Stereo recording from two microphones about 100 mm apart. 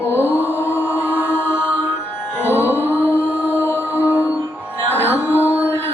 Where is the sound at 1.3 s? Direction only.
20° left (ahead or behind).